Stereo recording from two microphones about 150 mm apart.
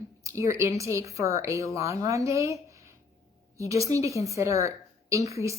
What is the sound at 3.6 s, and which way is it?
A woman's voice, 20° right (ahead or behind).